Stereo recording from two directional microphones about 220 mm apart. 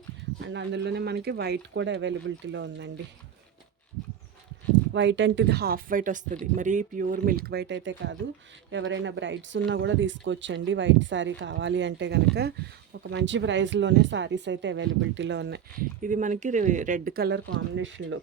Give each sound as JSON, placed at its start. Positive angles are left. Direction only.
{"t": 0.4, "sound": "speech", "side_deg": -55}
{"t": 4.9, "sound": "speech", "side_deg": -55}